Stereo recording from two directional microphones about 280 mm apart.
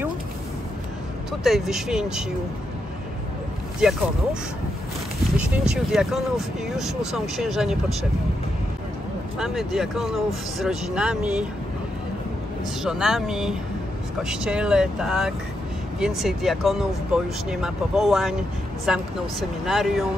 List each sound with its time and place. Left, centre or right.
1.4 s speech: centre
3.8 s speech: centre
5.5 s speech: centre
9.4 s speech: centre
12.8 s speech: centre